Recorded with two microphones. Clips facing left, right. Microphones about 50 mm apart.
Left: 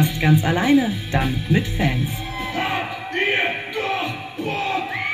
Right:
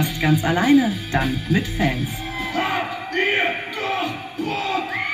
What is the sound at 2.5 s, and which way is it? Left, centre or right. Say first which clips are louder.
Basketball bounce: right 1 dB; left.